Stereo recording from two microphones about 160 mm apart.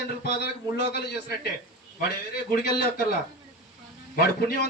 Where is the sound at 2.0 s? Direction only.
65° left (ahead or behind).